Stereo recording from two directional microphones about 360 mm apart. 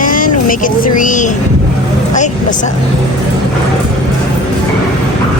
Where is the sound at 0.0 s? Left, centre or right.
Left.